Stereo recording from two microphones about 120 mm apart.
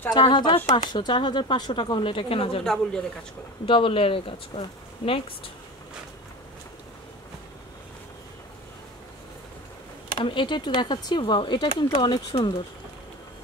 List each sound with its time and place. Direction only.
0.1 s speech: 40° left (ahead or behind)
2.6 s speech: 5° left (ahead or behind)
3.6 s speech: 45° left (ahead or behind)
10.2 s speech: 40° left (ahead or behind)